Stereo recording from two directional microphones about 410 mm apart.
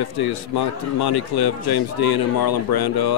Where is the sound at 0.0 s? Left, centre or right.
Left.